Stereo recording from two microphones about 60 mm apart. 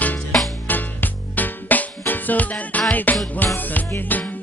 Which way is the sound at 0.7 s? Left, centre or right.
Left.